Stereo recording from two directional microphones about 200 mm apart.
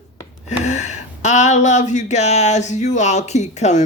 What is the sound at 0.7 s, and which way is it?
Speech, 35° left (ahead or behind).